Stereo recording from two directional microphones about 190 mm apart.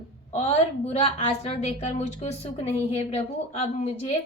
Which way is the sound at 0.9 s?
30° left (ahead or behind).